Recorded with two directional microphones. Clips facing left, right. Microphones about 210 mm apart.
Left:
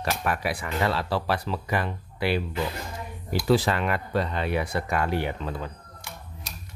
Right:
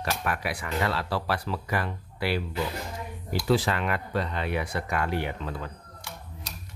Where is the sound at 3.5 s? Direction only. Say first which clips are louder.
Left 2 dB; 35° left (ahead or behind).